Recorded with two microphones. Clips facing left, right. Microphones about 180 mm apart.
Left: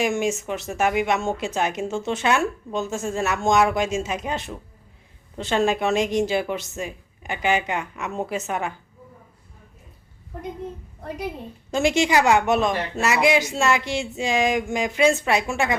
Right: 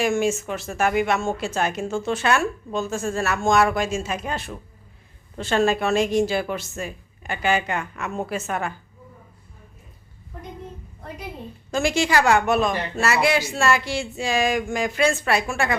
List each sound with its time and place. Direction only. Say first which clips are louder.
0.0 s a woman's voice: right 1 dB; 20° left (ahead or behind)
11.7 s speech: left 1 dB; 20° left (ahead or behind)